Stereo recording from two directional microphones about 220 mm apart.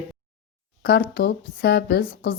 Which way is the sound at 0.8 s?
45° left (ahead or behind).